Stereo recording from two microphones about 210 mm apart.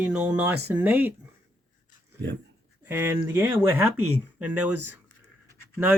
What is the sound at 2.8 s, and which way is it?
Speech, 10° right (ahead or behind).